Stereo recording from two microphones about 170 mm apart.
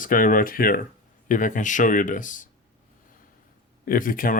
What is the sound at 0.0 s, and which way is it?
Speech, 55° left (ahead or behind).